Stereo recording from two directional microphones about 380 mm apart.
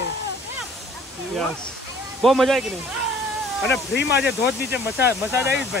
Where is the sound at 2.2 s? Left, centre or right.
Centre.